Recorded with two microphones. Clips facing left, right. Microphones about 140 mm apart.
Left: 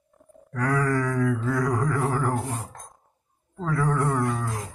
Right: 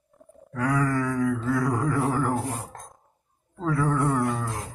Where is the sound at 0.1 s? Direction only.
Centre (ahead or behind).